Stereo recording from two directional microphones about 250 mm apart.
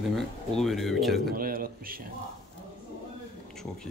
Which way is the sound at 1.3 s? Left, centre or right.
Right.